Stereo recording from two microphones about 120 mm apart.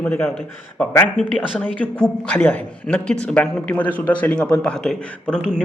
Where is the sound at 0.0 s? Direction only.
15° left (ahead or behind).